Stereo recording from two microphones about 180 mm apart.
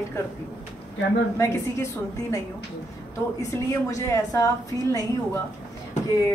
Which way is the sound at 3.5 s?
15° left (ahead or behind).